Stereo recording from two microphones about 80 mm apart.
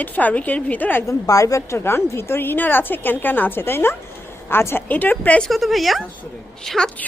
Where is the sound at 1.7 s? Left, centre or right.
Left.